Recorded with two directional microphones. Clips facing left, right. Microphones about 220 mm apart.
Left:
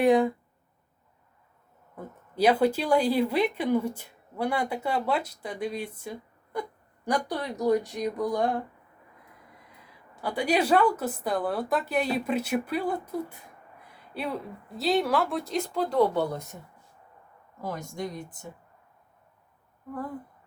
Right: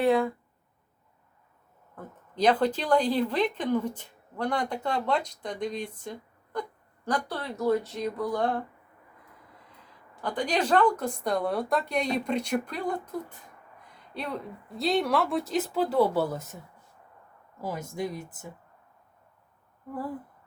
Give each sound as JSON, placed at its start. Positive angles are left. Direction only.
{"t": 0.0, "sound": "speech", "side_deg": 15}
{"t": 2.0, "sound": "speech", "side_deg": 10}
{"t": 17.6, "sound": "a woman's voice", "side_deg": -5}